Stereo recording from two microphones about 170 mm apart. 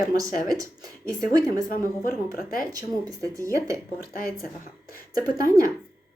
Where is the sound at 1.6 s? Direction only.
55° left (ahead or behind).